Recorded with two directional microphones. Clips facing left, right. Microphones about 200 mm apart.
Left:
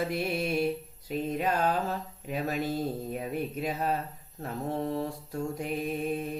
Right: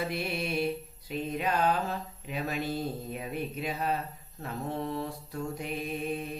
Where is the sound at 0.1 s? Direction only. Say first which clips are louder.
Left 3 dB; 40° left (ahead or behind).